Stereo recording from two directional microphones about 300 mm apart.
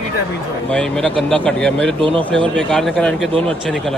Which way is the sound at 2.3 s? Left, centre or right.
Centre.